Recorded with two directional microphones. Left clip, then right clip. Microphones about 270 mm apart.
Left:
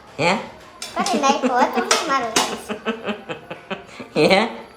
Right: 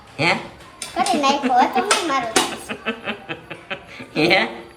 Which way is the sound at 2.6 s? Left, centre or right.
Centre.